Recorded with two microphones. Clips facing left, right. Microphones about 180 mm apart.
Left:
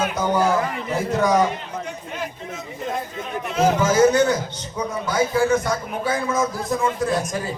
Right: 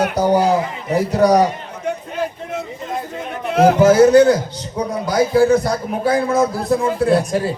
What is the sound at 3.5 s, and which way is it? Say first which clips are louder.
Speech: right 8 dB; 60° right (ahead or behind).